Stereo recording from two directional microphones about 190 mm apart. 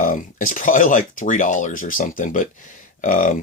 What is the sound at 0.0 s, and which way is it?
Speech, 45° left (ahead or behind).